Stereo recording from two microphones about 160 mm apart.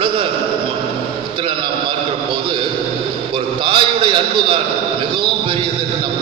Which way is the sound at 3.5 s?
35° right (ahead or behind).